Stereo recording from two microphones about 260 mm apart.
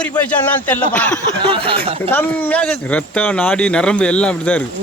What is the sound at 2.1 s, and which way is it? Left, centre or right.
Speech, centre.